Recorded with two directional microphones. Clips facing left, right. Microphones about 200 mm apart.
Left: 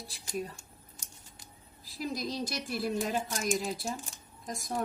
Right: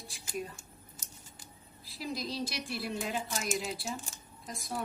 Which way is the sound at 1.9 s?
45° left (ahead or behind).